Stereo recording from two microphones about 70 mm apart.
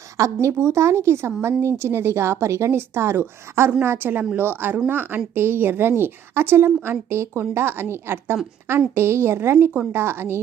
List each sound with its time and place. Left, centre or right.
0.2 s a woman's voice: right
0.5 s speech: right